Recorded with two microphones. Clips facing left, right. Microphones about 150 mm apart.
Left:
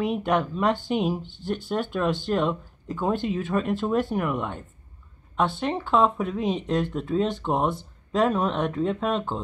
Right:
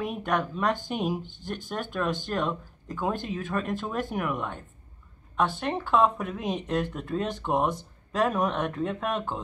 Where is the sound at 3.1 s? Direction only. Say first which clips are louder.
Left 6 dB; 45° right (ahead or behind).